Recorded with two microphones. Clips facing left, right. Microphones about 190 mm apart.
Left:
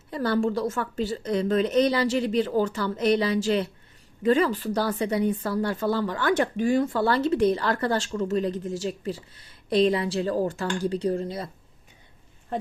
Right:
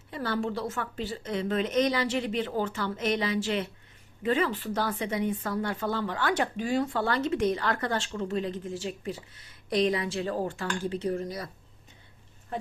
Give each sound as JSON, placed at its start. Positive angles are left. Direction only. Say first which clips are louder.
{"t": 0.1, "sound": "speech", "louder": "left 6 dB", "side_deg": 40}